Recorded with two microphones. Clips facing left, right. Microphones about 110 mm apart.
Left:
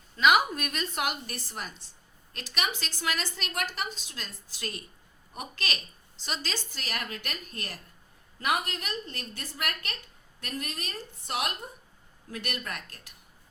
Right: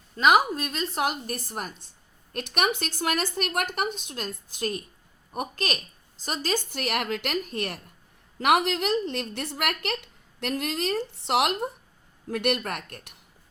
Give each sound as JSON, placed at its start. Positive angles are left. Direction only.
{"t": 0.2, "sound": "a woman's voice", "side_deg": -40}
{"t": 1.5, "sound": "a woman's voice", "side_deg": -50}
{"t": 8.4, "sound": "a woman's voice", "side_deg": -80}
{"t": 12.3, "sound": "a woman's voice", "side_deg": -65}